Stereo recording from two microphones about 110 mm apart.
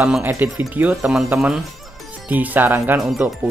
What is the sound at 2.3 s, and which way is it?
Speech, 15° right (ahead or behind).